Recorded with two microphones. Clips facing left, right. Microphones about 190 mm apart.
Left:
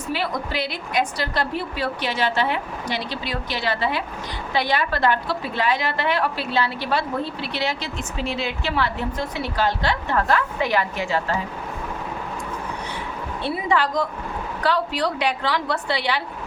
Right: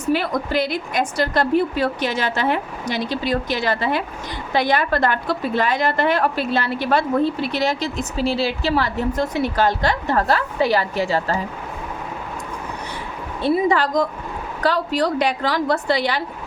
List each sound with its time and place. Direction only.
0.1 s a woman's voice: 50° right (ahead or behind)
13.4 s a woman's voice: 40° right (ahead or behind)